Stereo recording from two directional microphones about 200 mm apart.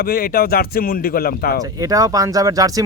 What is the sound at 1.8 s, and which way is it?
Speech, 15° right (ahead or behind).